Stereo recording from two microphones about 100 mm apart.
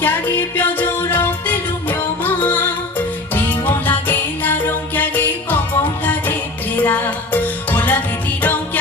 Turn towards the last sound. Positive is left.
turn(degrees=20)  # may be behind; listen again after turning